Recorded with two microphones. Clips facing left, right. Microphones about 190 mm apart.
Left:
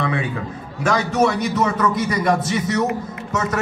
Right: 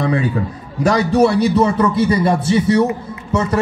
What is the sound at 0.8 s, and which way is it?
A man's voice, 35° right (ahead or behind).